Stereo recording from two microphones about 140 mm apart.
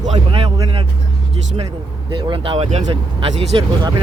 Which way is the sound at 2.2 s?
40° right (ahead or behind).